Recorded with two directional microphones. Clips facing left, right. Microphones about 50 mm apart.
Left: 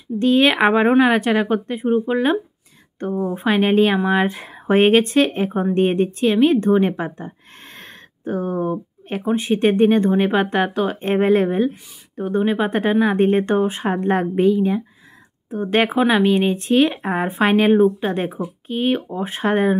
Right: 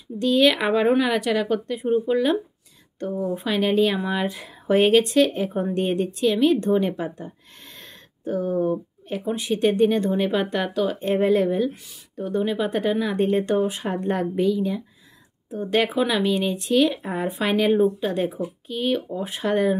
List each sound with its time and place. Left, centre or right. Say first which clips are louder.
0.2 s a woman's voice: left 4 dB; left